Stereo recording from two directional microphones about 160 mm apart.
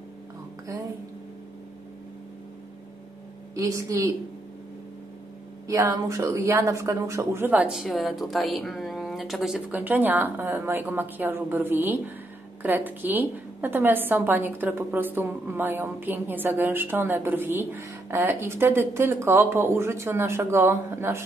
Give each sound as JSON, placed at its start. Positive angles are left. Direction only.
{"t": 3.5, "sound": "speech", "side_deg": -20}
{"t": 5.7, "sound": "a woman's voice", "side_deg": -20}